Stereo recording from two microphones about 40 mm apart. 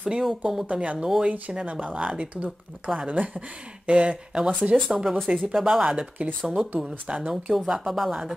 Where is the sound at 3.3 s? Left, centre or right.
Right.